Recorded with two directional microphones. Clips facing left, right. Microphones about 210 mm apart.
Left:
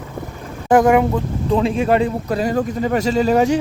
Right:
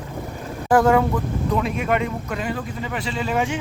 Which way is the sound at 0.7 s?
15° left (ahead or behind).